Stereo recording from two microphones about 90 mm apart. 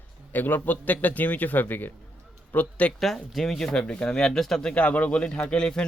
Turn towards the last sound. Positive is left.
turn(degrees=10)  # may be behind; listen again after turning